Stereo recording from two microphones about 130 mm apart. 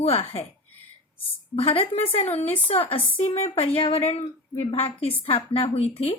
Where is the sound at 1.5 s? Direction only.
45° left (ahead or behind).